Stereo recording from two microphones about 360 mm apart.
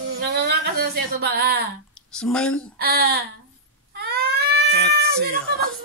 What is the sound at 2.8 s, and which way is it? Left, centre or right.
Speech, right.